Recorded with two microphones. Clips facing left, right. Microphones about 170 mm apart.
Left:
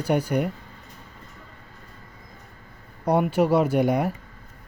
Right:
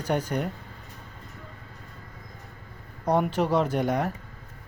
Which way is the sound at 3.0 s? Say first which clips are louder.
Left 3 dB; 10° left (ahead or behind).